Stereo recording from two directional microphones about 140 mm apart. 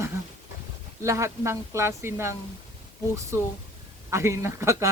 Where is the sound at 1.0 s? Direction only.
20° right (ahead or behind).